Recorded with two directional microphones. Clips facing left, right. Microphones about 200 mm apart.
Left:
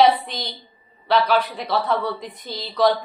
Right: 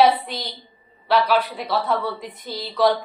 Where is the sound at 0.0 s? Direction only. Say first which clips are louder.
Even; 10° right (ahead or behind).